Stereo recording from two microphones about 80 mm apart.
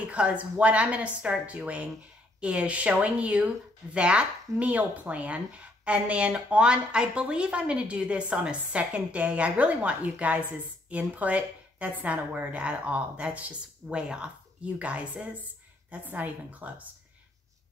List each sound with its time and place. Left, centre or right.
0.1 s a woman's voice: centre